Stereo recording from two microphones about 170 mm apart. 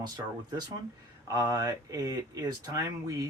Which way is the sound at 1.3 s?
20° right (ahead or behind).